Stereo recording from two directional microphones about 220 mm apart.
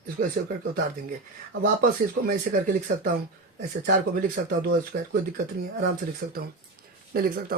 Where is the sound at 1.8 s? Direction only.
40° right (ahead or behind).